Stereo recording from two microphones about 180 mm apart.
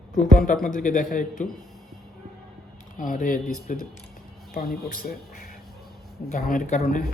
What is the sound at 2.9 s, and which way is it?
Speech, 50° left (ahead or behind).